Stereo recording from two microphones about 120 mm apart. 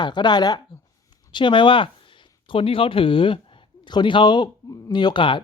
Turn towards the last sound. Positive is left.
turn(degrees=45)  # may be behind; listen again after turning